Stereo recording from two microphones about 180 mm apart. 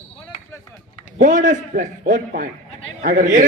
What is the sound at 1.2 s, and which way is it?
A man's voice, 45° right (ahead or behind).